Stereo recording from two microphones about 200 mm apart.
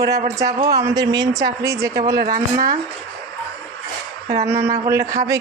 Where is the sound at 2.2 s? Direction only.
45° right (ahead or behind).